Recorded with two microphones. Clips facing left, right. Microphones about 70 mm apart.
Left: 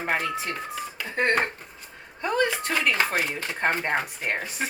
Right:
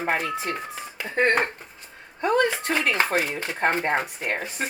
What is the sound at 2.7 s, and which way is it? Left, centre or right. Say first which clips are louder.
Speech: right 2 dB; right.